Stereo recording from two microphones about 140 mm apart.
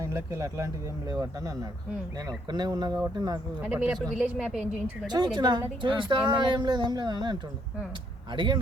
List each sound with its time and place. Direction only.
0.0 s speech: 20° right (ahead or behind)
3.6 s speech: 10° right (ahead or behind)
5.0 s speech: 30° right (ahead or behind)